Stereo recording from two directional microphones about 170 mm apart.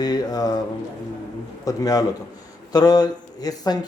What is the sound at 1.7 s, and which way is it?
A man's voice, 20° left (ahead or behind).